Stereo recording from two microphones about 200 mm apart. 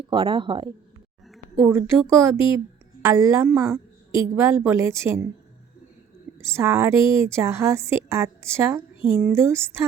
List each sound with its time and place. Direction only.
0.0 s speech: 25° right (ahead or behind)
1.3 s a woman's voice: 10° right (ahead or behind)
6.4 s a woman's voice: 15° right (ahead or behind)